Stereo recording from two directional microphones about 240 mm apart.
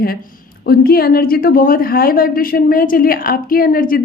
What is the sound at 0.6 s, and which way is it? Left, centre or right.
A woman's voice, left.